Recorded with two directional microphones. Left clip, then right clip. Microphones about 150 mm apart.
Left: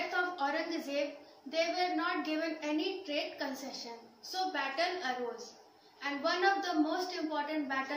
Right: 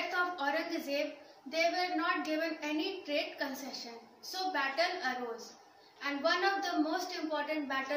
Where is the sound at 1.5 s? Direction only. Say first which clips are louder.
Right 1 dB; 15° right (ahead or behind).